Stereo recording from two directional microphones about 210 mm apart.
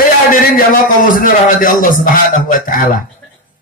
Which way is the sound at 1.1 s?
40° left (ahead or behind).